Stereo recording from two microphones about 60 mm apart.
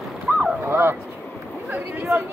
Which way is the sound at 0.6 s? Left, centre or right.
Right.